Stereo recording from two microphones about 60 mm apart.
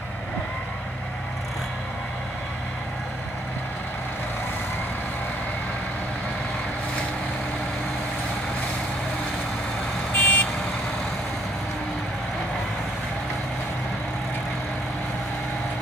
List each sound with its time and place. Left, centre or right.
10.1 s vehicle: left